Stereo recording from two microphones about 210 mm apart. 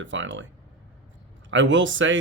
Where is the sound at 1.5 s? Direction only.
60° right (ahead or behind).